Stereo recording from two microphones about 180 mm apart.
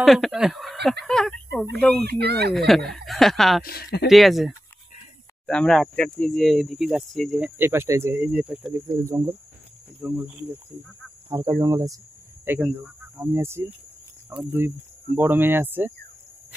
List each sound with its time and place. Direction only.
0.0 s speech: centre (ahead or behind)
2.0 s fowl: 65° right (ahead or behind)
2.5 s speech: centre (ahead or behind)
3.6 s speech: 60° left (ahead or behind)
4.1 s speech: centre (ahead or behind)
11.2 s speech: 20° right (ahead or behind)